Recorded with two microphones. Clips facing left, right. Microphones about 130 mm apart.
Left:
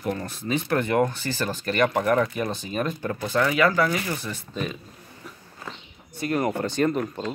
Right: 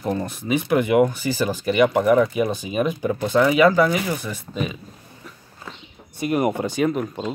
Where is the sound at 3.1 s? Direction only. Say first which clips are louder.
Right 6 dB; 20° right (ahead or behind).